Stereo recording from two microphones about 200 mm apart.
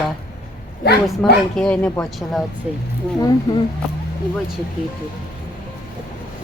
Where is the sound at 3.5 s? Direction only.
20° left (ahead or behind).